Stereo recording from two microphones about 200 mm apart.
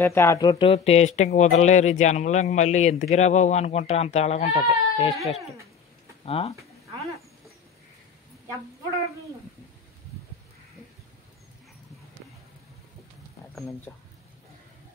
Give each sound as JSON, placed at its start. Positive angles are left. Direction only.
{"t": 0.0, "sound": "speech", "side_deg": 10}
{"t": 5.1, "sound": "speech", "side_deg": 0}
{"t": 6.2, "sound": "speech", "side_deg": 30}
{"t": 13.9, "sound": "speech", "side_deg": 15}